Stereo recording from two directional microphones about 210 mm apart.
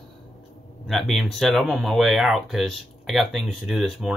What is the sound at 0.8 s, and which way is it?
Speech, centre (ahead or behind).